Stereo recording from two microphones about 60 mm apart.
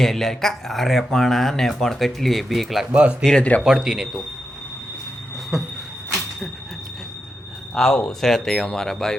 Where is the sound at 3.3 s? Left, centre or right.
Left.